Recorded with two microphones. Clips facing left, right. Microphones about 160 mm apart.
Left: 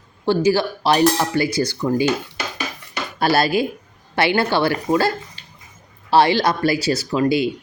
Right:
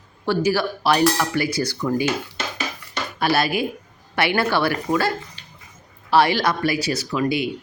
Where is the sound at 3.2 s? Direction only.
30° left (ahead or behind).